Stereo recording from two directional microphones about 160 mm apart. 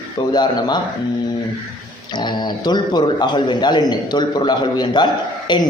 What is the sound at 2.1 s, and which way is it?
A man's voice, 25° left (ahead or behind).